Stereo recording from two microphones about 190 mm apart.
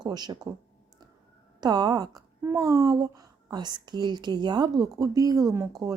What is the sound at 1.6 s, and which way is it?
A woman's voice, 20° right (ahead or behind).